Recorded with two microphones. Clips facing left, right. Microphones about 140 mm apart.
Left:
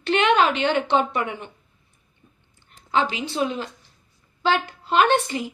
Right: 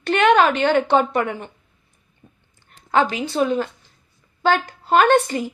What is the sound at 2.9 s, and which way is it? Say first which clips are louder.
A woman's voice: right 4 dB; 45° right (ahead or behind).